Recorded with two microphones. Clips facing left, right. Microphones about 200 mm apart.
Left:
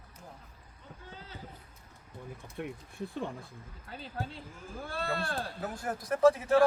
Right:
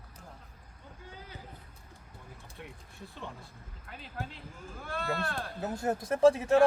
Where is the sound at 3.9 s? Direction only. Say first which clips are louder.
Left 2 dB; 35° left (ahead or behind).